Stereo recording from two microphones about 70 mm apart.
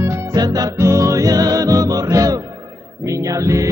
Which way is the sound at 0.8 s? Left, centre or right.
Right.